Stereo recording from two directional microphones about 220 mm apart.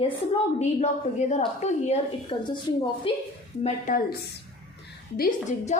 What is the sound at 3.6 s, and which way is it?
Speech, 35° left (ahead or behind).